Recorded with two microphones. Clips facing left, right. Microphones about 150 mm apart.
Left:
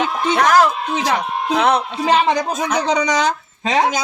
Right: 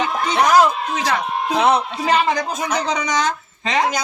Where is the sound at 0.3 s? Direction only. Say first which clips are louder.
Even; 20° right (ahead or behind).